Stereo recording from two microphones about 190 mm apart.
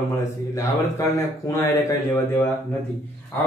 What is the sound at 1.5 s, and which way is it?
Speech, 15° left (ahead or behind).